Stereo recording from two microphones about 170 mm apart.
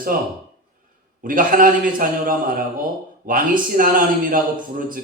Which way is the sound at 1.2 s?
55° right (ahead or behind).